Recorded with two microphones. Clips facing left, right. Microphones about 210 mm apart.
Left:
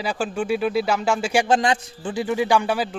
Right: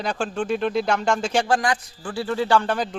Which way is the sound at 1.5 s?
25° left (ahead or behind).